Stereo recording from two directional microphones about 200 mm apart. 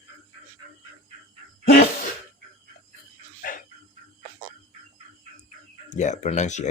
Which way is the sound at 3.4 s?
45° left (ahead or behind).